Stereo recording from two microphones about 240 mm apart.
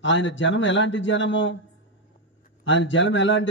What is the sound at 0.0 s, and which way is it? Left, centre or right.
A man's voice, left.